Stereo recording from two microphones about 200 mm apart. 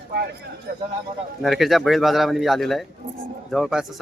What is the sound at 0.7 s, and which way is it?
Speech, 45° right (ahead or behind).